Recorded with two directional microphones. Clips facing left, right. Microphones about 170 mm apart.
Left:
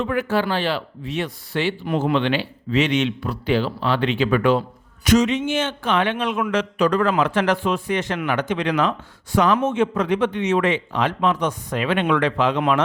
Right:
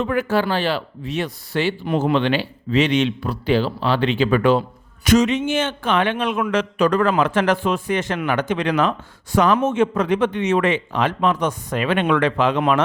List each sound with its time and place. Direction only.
0.0 s speech: 40° right (ahead or behind)
5.0 s speech: 50° right (ahead or behind)